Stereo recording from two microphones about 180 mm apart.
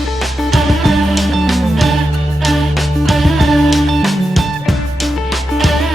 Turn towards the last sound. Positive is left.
turn(degrees=0)  # may be behind; listen again after turning